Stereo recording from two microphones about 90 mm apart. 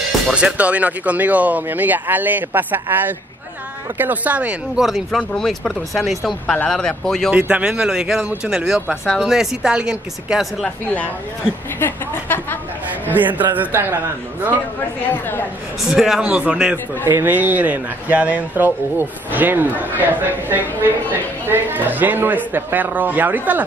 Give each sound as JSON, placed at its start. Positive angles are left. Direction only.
{"t": 0.3, "sound": "speech", "side_deg": -10}
{"t": 7.3, "sound": "speech", "side_deg": -15}
{"t": 11.8, "sound": "speech", "side_deg": 25}
{"t": 13.4, "sound": "speech", "side_deg": -20}
{"t": 15.0, "sound": "speech", "side_deg": 25}
{"t": 15.9, "sound": "speech", "side_deg": -5}
{"t": 17.0, "sound": "speech", "side_deg": -25}